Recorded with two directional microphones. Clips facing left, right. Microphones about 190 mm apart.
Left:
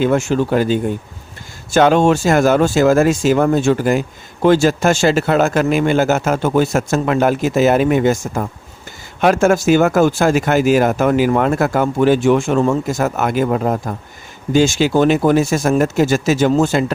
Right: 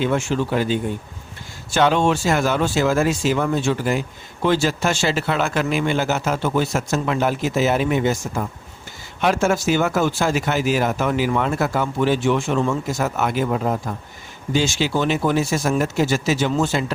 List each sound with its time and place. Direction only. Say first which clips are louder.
0.0 s speech: left 5 dB; 45° left (ahead or behind)